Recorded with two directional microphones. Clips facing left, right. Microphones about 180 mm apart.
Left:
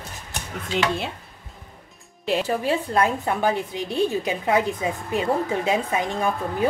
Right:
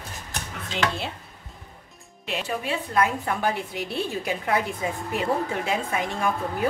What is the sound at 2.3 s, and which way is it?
A woman's voice, 35° left (ahead or behind).